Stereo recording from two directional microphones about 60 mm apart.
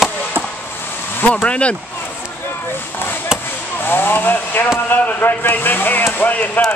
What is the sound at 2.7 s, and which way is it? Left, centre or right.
Chop, left.